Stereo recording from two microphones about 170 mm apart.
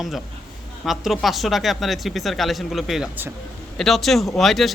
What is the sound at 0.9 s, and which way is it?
Speech, centre (ahead or behind).